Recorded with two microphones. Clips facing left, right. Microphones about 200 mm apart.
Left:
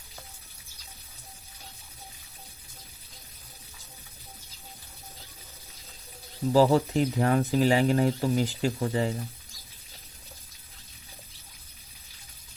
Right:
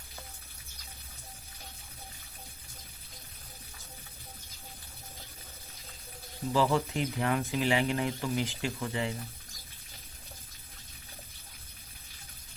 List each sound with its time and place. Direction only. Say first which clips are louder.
6.5 s speech: left 7 dB; 40° left (ahead or behind)